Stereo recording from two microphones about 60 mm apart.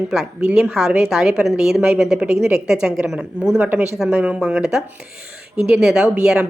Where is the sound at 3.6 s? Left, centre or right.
Right.